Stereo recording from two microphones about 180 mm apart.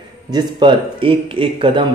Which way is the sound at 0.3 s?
25° right (ahead or behind).